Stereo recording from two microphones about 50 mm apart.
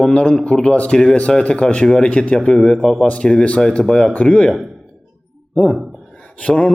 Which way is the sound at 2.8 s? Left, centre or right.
Centre.